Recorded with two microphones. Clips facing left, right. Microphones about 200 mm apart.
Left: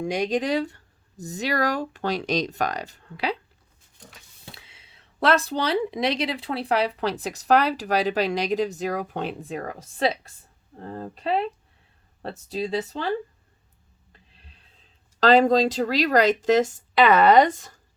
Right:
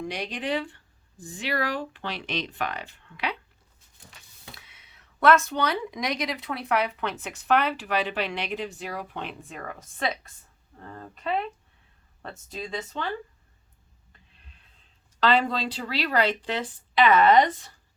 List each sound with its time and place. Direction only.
0.0 s speech: 45° left (ahead or behind)
4.5 s speech: 25° left (ahead or behind)
15.2 s speech: 40° left (ahead or behind)